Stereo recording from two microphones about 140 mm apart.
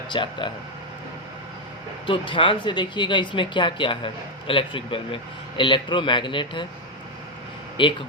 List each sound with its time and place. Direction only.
0.1 s speech: 35° left (ahead or behind)
2.0 s speech: 35° left (ahead or behind)
7.8 s speech: 35° left (ahead or behind)